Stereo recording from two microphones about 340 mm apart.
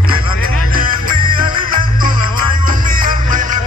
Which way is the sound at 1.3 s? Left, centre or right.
Centre.